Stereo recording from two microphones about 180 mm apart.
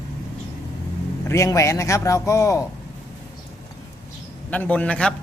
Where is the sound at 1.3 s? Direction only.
15° left (ahead or behind).